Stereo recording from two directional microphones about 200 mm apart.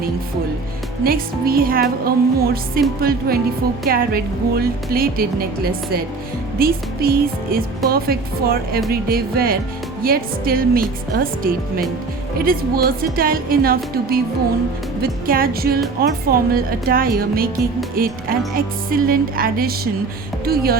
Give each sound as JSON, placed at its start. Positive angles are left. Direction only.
{"t": 1.0, "sound": "speech", "side_deg": -50}
{"t": 6.6, "sound": "speech", "side_deg": -50}